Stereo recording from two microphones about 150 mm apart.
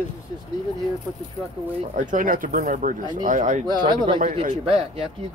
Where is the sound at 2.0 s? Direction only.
65° right (ahead or behind).